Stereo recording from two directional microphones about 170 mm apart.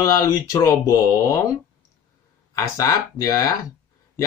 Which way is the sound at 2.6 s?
20° left (ahead or behind).